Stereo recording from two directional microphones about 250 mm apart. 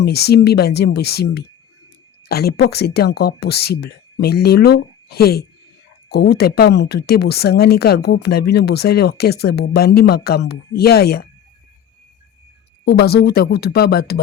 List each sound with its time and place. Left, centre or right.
0.0 s speech: left
12.8 s speech: left